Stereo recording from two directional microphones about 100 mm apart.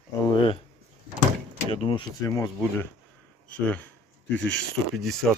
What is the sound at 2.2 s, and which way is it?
Speech, 30° left (ahead or behind).